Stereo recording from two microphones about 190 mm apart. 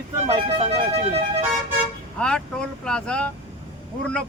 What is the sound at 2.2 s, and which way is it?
Speech, 5° left (ahead or behind).